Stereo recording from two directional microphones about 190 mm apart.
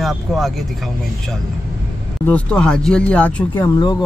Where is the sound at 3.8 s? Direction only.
25° left (ahead or behind).